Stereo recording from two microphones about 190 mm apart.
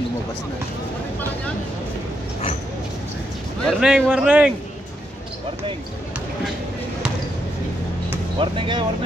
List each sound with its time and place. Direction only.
3.6 s a man's voice: centre (ahead or behind)
8.4 s speech: 25° right (ahead or behind)